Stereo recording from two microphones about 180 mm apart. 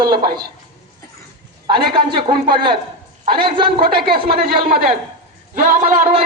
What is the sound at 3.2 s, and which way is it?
Speech, 25° right (ahead or behind).